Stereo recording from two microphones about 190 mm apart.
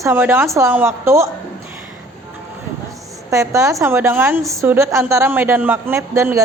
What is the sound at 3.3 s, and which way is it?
A woman's voice, 15° right (ahead or behind).